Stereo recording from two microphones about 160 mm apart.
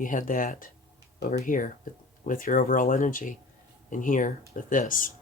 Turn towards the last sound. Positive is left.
turn(degrees=55)  # may be behind; listen again after turning